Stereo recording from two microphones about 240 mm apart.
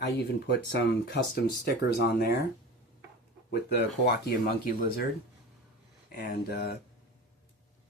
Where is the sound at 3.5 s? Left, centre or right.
Left.